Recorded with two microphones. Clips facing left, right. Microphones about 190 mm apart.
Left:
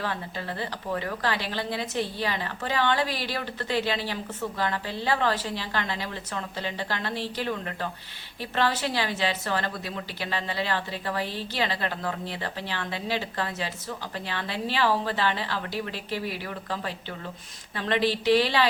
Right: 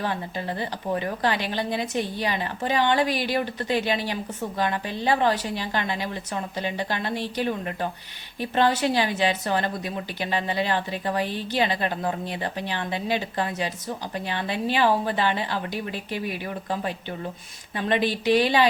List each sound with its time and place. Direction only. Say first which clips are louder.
0.6 s a woman's voice: right 3 dB; 20° right (ahead or behind)
17.7 s a woman's voice: right 2 dB; 15° right (ahead or behind)